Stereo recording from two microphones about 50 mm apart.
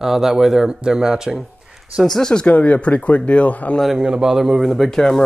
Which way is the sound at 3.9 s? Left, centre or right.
Centre.